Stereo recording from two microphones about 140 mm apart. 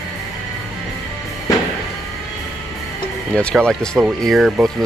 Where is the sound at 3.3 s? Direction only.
10° left (ahead or behind).